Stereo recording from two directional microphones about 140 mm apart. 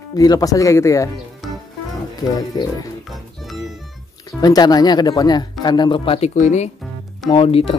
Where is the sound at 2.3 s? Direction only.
25° left (ahead or behind).